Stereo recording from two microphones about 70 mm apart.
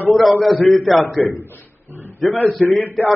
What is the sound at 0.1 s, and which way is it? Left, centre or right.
A man's voice, centre.